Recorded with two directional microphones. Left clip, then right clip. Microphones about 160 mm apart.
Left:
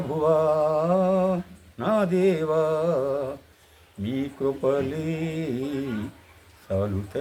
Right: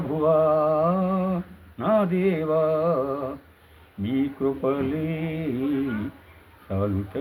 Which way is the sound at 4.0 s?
35° left (ahead or behind).